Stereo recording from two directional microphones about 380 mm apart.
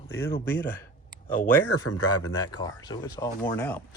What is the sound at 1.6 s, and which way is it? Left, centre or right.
Speech, left.